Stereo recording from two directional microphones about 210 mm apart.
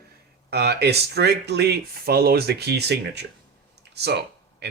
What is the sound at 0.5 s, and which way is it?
Speech, 50° right (ahead or behind).